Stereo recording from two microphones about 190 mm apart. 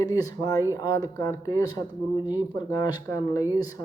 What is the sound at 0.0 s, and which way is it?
Speech, 20° left (ahead or behind).